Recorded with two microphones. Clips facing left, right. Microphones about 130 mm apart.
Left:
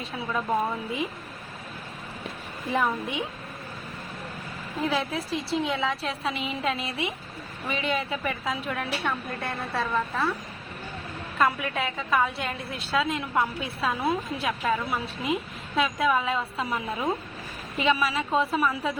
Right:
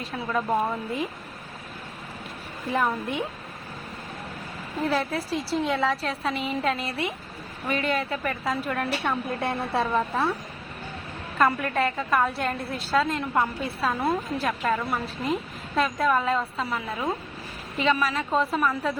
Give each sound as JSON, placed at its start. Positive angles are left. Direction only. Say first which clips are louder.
{"t": 0.0, "sound": "a woman's voice", "louder": "right 2 dB", "side_deg": 0}
{"t": 2.7, "sound": "a woman's voice", "louder": "right 1 dB", "side_deg": 5}
{"t": 4.8, "sound": "a woman's voice", "louder": "right 2 dB", "side_deg": 5}
{"t": 9.4, "sound": "a woman's voice", "louder": "right 5 dB", "side_deg": -25}
{"t": 11.3, "sound": "a woman's voice", "louder": "right 3 dB", "side_deg": 0}
{"t": 16.6, "sound": "a woman's voice", "louder": "left 1 dB", "side_deg": 15}